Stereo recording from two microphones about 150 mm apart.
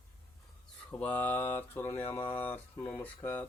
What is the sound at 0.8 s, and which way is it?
Mantra, 10° left (ahead or behind).